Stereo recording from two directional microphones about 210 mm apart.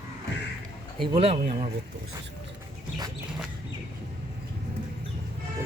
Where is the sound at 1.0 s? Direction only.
25° right (ahead or behind).